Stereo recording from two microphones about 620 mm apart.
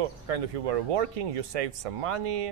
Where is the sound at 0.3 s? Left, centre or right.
Right.